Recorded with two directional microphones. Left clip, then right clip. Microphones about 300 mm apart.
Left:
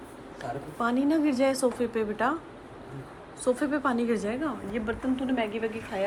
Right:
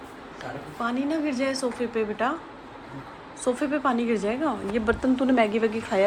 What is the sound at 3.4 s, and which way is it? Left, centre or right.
A woman's voice, centre.